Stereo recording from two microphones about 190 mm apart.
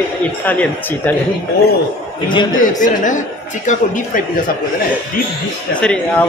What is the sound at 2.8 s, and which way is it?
Speech, 40° left (ahead or behind).